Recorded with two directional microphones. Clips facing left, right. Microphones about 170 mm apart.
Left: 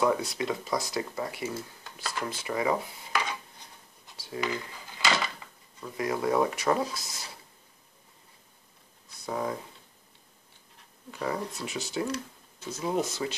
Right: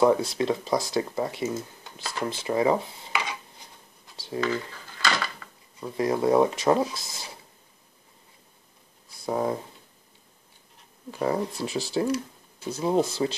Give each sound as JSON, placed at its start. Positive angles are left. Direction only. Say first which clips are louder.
{"t": 0.0, "sound": "speech", "louder": "right 6 dB", "side_deg": -30}
{"t": 4.4, "sound": "dishes", "louder": "right 5 dB", "side_deg": 15}
{"t": 5.9, "sound": "speech", "louder": "right 5 dB", "side_deg": -30}
{"t": 9.2, "sound": "speech", "louder": "right 5 dB", "side_deg": -30}
{"t": 11.1, "sound": "speech", "louder": "right 6 dB", "side_deg": -30}